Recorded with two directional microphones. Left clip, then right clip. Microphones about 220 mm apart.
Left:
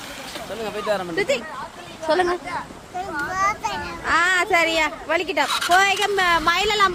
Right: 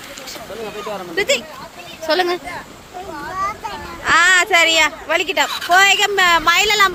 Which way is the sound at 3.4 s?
20° left (ahead or behind).